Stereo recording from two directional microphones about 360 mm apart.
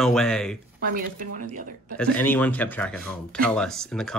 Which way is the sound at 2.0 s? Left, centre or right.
Centre.